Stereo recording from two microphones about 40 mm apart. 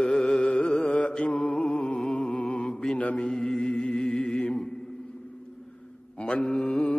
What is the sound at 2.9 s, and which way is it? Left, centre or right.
Speech, left.